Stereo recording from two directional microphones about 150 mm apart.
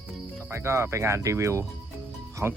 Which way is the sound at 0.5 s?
15° right (ahead or behind).